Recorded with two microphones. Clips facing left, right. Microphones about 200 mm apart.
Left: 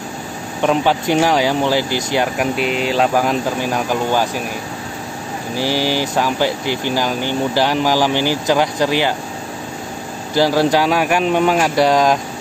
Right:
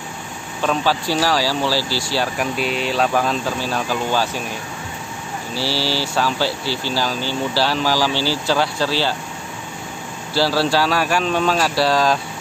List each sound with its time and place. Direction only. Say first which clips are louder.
0.6 s speech: left 4 dB; 20° left (ahead or behind)
2.8 s speech: left 3 dB; 5° left (ahead or behind)
5.5 s speech: left 4 dB; 15° left (ahead or behind)
10.3 s speech: left 4 dB; 15° left (ahead or behind)